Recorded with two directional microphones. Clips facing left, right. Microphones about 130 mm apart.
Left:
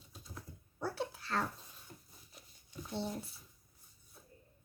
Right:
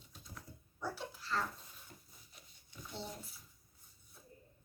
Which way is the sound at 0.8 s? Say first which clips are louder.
Left 4 dB; 60° left (ahead or behind).